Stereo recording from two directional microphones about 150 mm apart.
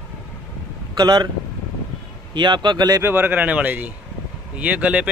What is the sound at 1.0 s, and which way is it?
Speech, 30° right (ahead or behind).